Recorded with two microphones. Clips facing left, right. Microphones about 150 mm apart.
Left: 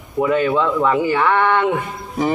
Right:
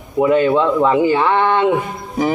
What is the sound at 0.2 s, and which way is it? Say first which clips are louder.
Speech: right 3 dB; 20° right (ahead or behind).